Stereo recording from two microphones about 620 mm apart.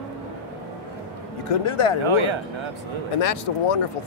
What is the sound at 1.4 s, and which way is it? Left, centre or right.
Speech, left.